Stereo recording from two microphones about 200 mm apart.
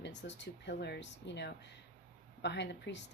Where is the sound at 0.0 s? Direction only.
60° left (ahead or behind).